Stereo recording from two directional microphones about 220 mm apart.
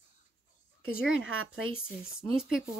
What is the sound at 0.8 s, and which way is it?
Speech, 65° right (ahead or behind).